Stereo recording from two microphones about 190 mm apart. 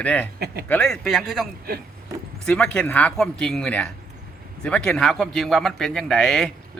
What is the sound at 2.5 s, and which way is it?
A man's voice, 5° left (ahead or behind).